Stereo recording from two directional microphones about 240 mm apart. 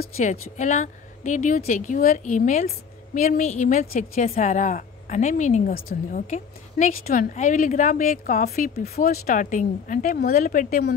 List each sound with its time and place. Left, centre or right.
0.0 s a woman's voice: left